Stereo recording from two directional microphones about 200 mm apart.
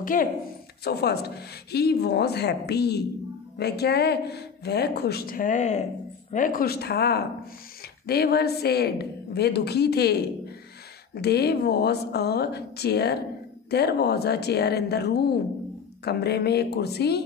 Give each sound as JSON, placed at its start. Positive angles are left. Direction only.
{"t": 0.0, "sound": "a woman's voice", "side_deg": 45}
{"t": 11.1, "sound": "a woman's voice", "side_deg": 55}